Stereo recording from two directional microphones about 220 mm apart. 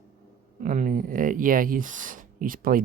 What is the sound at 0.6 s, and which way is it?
Speech, 35° right (ahead or behind).